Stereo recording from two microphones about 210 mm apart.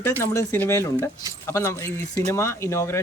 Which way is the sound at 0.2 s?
10° left (ahead or behind).